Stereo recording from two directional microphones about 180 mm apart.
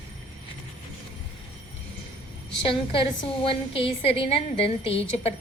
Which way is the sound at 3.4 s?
30° left (ahead or behind).